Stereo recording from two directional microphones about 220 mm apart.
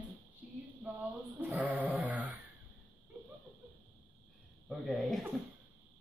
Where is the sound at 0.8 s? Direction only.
5° right (ahead or behind).